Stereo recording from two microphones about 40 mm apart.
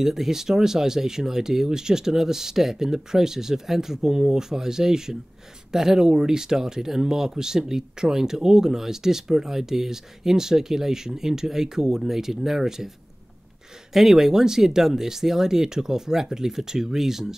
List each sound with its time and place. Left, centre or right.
0.0 s speech: centre
13.9 s speech: centre